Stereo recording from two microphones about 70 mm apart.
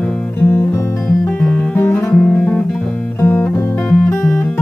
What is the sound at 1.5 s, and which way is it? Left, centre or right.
Music, left.